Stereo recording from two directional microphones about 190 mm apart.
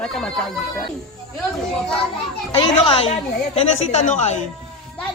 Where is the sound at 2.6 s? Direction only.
25° left (ahead or behind).